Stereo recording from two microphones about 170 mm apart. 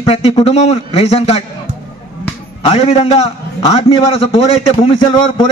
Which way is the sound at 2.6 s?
35° left (ahead or behind).